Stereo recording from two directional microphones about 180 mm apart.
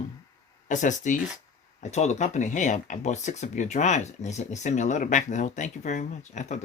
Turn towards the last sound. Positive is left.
turn(degrees=40)  # may be behind; listen again after turning